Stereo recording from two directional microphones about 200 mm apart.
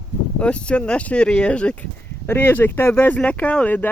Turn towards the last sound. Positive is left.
turn(degrees=10)  # may be behind; listen again after turning